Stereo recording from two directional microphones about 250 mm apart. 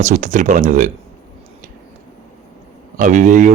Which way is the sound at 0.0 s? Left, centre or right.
Right.